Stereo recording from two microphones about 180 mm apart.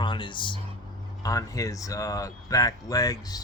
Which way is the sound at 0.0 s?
25° left (ahead or behind).